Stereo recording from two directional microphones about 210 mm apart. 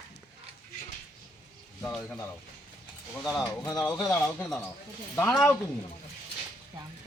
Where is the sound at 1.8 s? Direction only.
10° left (ahead or behind).